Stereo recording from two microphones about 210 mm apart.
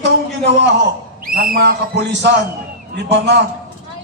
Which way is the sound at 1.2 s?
45° right (ahead or behind).